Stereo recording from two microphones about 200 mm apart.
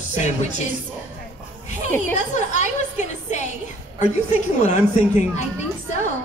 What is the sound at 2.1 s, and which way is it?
A woman's voice, 35° left (ahead or behind).